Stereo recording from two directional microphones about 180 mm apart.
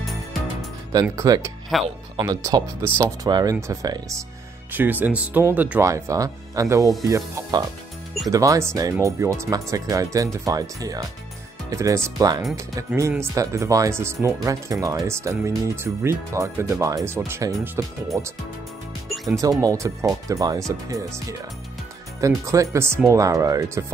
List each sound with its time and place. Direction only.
0.0 s music: centre (ahead or behind)
1.0 s speech: 20° right (ahead or behind)
1.7 s speech: centre (ahead or behind)
2.1 s speech: 20° right (ahead or behind)
19.6 s speech: 15° right (ahead or behind)
22.2 s speech: 15° right (ahead or behind)